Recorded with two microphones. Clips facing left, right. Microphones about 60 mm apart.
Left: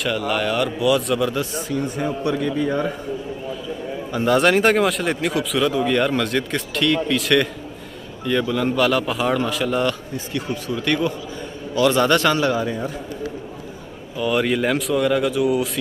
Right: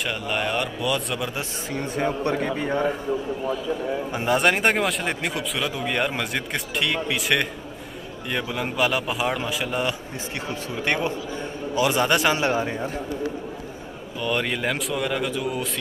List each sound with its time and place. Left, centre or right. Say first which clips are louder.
0.3 s speech: left 3 dB; centre
1.6 s a man's voice: left 2 dB; right
4.3 s speech: left 4 dB; centre
10.1 s speech: left 4 dB; right
12.4 s a man's voice: left 2 dB; right
14.1 s speech: left 5 dB; centre